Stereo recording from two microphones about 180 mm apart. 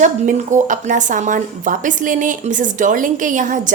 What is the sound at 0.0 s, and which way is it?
Speech, 40° right (ahead or behind).